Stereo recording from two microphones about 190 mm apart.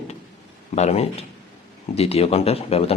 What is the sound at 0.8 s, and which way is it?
Speech, 35° left (ahead or behind).